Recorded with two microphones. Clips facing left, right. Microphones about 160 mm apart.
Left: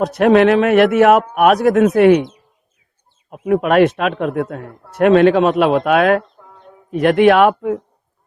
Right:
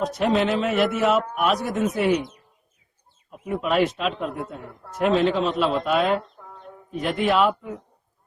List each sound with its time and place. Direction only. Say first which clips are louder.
0.0 s speech: left 10 dB; 70° left (ahead or behind)
3.2 s a man's voice: left 10 dB; 65° left (ahead or behind)
6.4 s a sound: even; centre (ahead or behind)
6.9 s speech: left 11 dB; 70° left (ahead or behind)